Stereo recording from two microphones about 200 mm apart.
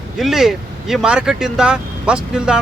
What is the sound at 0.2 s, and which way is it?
Speech, centre (ahead or behind).